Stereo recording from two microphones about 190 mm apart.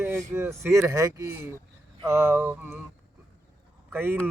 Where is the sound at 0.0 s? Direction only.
15° right (ahead or behind).